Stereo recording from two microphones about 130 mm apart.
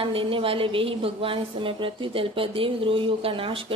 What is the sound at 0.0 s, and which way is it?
A woman's voice, 45° right (ahead or behind).